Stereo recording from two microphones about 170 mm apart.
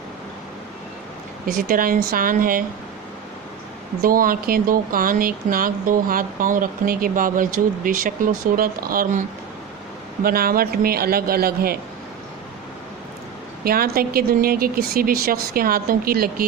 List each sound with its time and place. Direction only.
1.5 s speech: 55° right (ahead or behind)
4.0 s speech: 55° right (ahead or behind)
10.2 s speech: 60° right (ahead or behind)
13.7 s speech: 60° right (ahead or behind)